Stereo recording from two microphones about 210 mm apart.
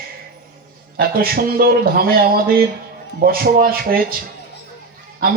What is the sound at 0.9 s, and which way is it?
Speech, 45° right (ahead or behind).